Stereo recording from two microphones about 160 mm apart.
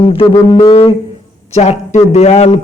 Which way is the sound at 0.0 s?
35° left (ahead or behind).